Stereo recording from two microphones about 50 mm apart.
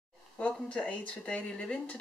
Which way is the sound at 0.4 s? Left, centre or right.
Centre.